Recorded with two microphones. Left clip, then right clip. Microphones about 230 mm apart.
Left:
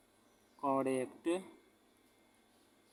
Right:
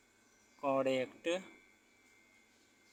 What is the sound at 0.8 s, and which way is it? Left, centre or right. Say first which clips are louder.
Speech: right 2 dB; centre.